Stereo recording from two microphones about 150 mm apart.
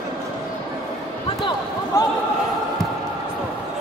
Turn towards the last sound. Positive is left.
turn(degrees=25)  # may be behind; listen again after turning